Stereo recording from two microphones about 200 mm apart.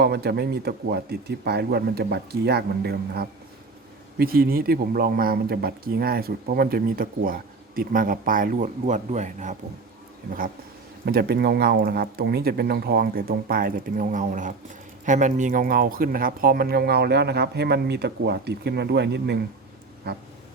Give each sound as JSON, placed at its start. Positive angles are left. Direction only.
{"t": 0.0, "sound": "speech", "side_deg": -55}
{"t": 11.0, "sound": "speech", "side_deg": -55}